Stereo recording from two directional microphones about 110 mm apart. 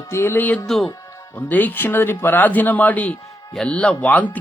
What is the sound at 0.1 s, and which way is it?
Speech, 20° left (ahead or behind).